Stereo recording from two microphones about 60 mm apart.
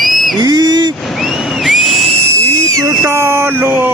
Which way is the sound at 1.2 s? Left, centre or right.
Centre.